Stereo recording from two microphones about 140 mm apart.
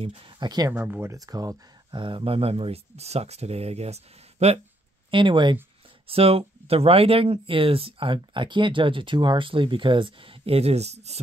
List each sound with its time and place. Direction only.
0.0 s speech: 40° right (ahead or behind)
0.7 s speech: 15° right (ahead or behind)
1.1 s speech: 25° right (ahead or behind); by 4.6 s 50° right (ahead or behind)
5.1 s speech: 35° right (ahead or behind)